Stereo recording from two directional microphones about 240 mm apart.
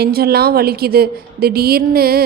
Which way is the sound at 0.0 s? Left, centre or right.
Right.